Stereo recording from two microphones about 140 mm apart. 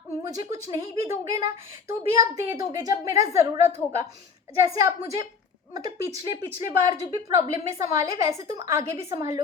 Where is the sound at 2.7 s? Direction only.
25° right (ahead or behind).